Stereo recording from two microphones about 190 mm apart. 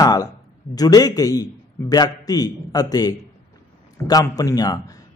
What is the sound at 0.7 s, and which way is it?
Speech, 20° left (ahead or behind).